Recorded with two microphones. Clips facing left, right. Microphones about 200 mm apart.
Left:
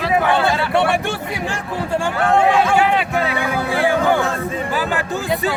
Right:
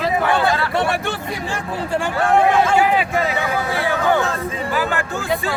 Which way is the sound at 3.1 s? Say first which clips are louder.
Even; 60° left (ahead or behind).